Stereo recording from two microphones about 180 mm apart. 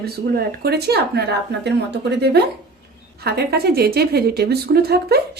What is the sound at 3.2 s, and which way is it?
A woman's voice, 60° right (ahead or behind).